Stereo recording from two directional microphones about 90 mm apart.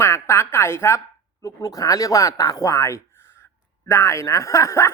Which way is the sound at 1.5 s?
40° left (ahead or behind).